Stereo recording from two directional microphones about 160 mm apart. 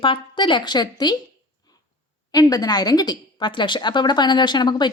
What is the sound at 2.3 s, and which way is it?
A woman's voice, 25° left (ahead or behind).